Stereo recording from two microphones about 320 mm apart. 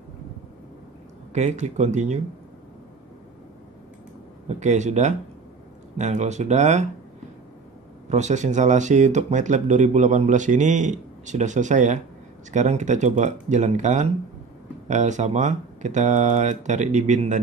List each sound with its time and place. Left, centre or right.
1.3 s speech: right
4.6 s speech: right
8.1 s speech: right